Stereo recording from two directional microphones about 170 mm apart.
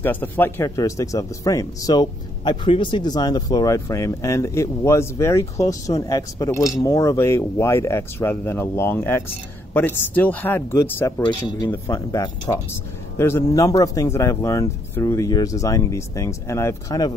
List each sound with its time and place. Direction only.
0.0 s speech: 10° left (ahead or behind)